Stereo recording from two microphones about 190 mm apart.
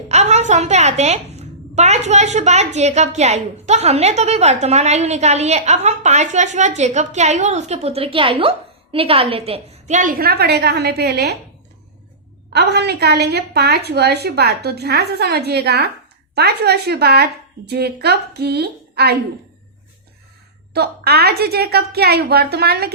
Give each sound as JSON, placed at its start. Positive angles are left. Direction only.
{"t": 0.1, "sound": "a woman's voice", "side_deg": -35}
{"t": 12.5, "sound": "a woman's voice", "side_deg": -60}
{"t": 20.7, "sound": "a woman's voice", "side_deg": -55}